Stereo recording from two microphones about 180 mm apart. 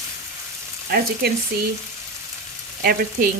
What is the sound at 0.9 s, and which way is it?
Frying, 60° right (ahead or behind).